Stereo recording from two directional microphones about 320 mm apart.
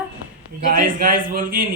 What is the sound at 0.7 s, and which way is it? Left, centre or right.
Speech, right.